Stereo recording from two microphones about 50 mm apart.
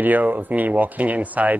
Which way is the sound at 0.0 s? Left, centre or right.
Right.